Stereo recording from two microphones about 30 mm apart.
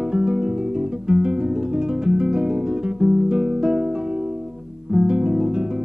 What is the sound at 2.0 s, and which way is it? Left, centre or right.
Music, right.